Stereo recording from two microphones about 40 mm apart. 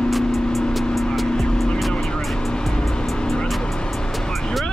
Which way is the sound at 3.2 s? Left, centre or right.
Left.